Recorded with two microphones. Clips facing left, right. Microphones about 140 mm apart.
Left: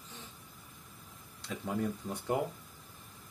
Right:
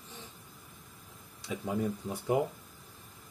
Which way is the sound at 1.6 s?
10° right (ahead or behind).